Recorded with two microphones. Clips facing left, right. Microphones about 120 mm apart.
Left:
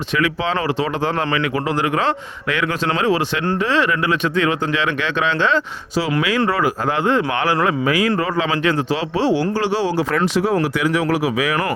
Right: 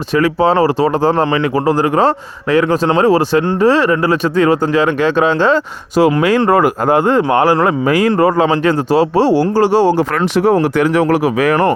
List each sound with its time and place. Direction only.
0.1 s speech: 40° right (ahead or behind)
10.3 s speech: 60° right (ahead or behind)